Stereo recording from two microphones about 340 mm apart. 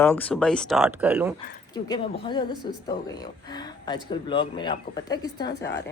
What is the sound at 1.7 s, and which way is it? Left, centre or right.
Speech, centre.